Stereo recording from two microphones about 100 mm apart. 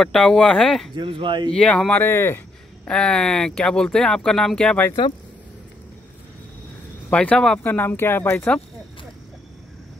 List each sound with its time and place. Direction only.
0.0 s speech: 5° left (ahead or behind)
0.9 s speech: 60° right (ahead or behind)
1.5 s speech: 10° left (ahead or behind)
2.9 s speech: 10° left (ahead or behind)
7.1 s speech: 10° left (ahead or behind)